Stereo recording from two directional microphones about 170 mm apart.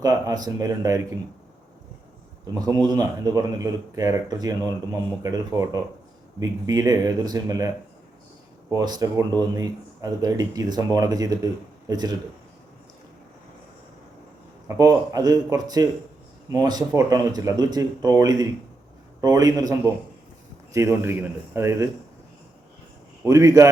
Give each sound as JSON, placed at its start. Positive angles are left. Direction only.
{"t": 0.0, "sound": "speech", "side_deg": -25}
{"t": 2.6, "sound": "speech", "side_deg": -25}
{"t": 8.7, "sound": "speech", "side_deg": -20}
{"t": 14.8, "sound": "speech", "side_deg": -20}
{"t": 20.7, "sound": "a man's voice", "side_deg": -15}
{"t": 23.2, "sound": "a man's voice", "side_deg": -20}